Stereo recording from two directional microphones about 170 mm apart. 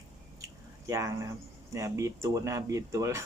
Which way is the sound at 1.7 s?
20° right (ahead or behind).